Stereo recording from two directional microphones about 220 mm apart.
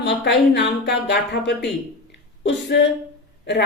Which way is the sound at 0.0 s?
50° left (ahead or behind).